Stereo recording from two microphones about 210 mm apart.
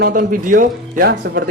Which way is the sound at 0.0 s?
40° right (ahead or behind).